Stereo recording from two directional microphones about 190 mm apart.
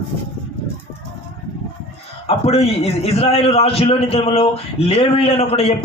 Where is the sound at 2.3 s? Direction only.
30° left (ahead or behind).